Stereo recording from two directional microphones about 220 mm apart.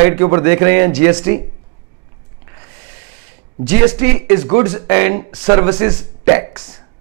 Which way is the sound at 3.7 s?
10° right (ahead or behind).